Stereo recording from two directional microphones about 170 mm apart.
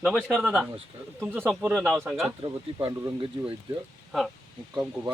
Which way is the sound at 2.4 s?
25° right (ahead or behind).